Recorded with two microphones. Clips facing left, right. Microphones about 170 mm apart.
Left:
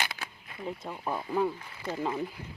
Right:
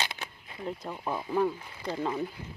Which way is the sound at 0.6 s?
Centre (ahead or behind).